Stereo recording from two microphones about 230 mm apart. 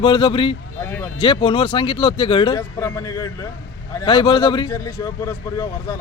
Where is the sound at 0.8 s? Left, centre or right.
Centre.